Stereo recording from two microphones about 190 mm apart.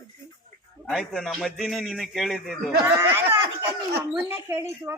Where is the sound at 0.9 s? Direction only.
Centre (ahead or behind).